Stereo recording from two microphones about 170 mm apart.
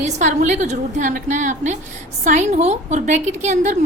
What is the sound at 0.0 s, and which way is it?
A woman's voice, 45° right (ahead or behind).